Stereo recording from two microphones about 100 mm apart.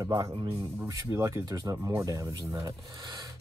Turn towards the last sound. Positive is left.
turn(degrees=-45)  # may be behind; listen again after turning